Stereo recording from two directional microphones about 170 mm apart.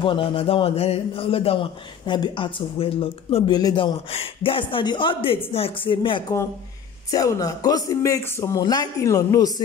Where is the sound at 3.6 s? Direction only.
25° left (ahead or behind).